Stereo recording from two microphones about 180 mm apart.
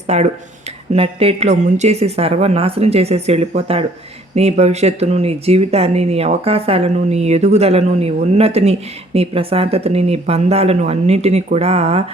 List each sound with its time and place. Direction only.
0.1 s speech: 40° right (ahead or behind)